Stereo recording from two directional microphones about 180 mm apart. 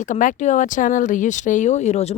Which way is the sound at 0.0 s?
45° left (ahead or behind).